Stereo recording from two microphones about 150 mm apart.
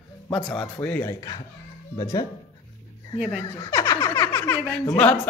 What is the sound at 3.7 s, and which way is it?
Speech, 15° left (ahead or behind).